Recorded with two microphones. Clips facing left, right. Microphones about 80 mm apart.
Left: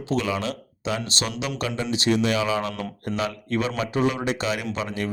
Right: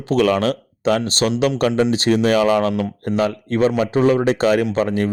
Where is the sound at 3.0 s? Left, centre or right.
Right.